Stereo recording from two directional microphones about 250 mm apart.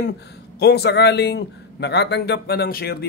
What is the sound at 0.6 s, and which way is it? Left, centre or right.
A man's voice, left.